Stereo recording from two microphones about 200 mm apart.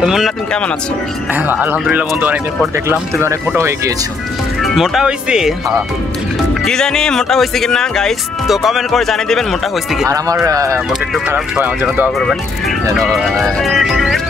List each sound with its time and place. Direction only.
0.0 s speech: centre (ahead or behind)
4.6 s speech: centre (ahead or behind)
6.6 s speech: 5° left (ahead or behind)
10.0 s speech: 15° right (ahead or behind)
11.2 s speech: 5° right (ahead or behind)